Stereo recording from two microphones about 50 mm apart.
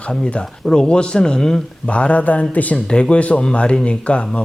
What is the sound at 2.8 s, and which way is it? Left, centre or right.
A man's voice, left.